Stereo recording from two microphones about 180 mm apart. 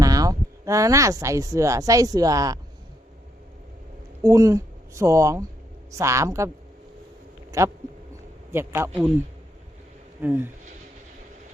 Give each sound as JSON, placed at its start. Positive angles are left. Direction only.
{"t": 0.0, "sound": "speech", "side_deg": -20}
{"t": 4.2, "sound": "speech", "side_deg": -20}
{"t": 7.5, "sound": "speech", "side_deg": -15}
{"t": 10.2, "sound": "speech", "side_deg": -10}